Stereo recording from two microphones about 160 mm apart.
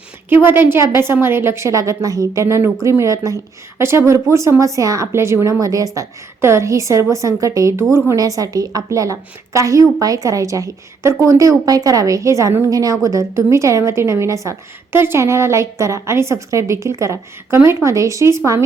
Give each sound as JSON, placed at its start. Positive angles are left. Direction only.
{"t": 0.4, "sound": "a woman's voice", "side_deg": -15}